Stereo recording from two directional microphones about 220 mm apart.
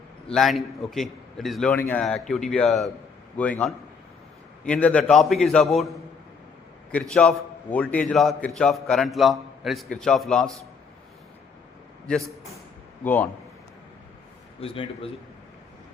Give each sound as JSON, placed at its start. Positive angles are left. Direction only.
{"t": 0.3, "sound": "a man's voice", "side_deg": 0}
{"t": 6.9, "sound": "a man's voice", "side_deg": 5}
{"t": 12.0, "sound": "a man's voice", "side_deg": 0}
{"t": 14.6, "sound": "a man's voice", "side_deg": 25}